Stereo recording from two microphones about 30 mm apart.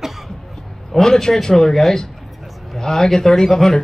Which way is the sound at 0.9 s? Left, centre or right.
Centre.